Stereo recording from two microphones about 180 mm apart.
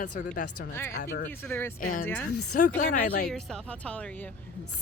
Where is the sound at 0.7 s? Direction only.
15° left (ahead or behind).